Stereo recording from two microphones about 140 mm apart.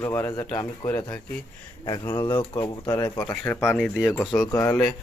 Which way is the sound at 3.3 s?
15° left (ahead or behind).